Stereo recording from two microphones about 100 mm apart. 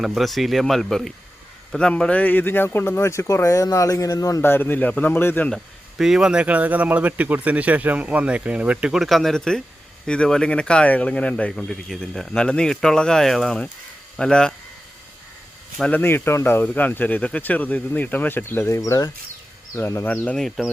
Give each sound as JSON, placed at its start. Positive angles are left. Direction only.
{"t": 0.0, "sound": "speech", "side_deg": 0}
{"t": 4.4, "sound": "speech", "side_deg": 20}
{"t": 5.5, "sound": "speech", "side_deg": 0}
{"t": 15.8, "sound": "speech", "side_deg": 20}
{"t": 19.7, "sound": "speech", "side_deg": 25}
{"t": 20.1, "sound": "speech", "side_deg": 5}